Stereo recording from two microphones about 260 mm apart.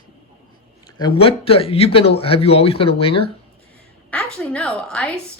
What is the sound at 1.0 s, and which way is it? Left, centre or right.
Speech, left.